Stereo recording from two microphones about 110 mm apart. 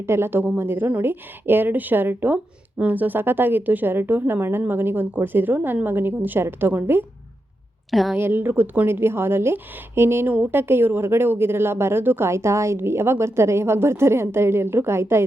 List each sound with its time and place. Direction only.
0.0 s speech: 20° right (ahead or behind)
7.9 s a woman's voice: centre (ahead or behind)
8.1 s speech: 20° right (ahead or behind)